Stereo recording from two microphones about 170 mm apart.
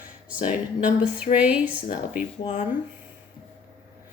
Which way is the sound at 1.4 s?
5° right (ahead or behind).